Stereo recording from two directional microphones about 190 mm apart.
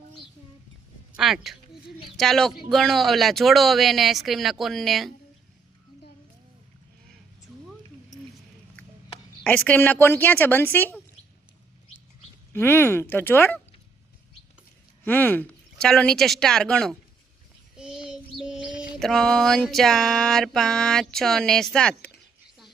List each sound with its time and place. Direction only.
1.1 s speech: centre (ahead or behind)
8.1 s a sound: 40° left (ahead or behind)
9.4 s a woman's voice: 10° left (ahead or behind)
12.5 s a woman's voice: 10° left (ahead or behind)
15.0 s speech: 10° left (ahead or behind)
17.7 s child singing: 5° right (ahead or behind)